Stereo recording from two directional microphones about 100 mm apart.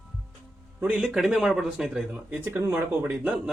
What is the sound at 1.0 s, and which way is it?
Speech, 5° right (ahead or behind).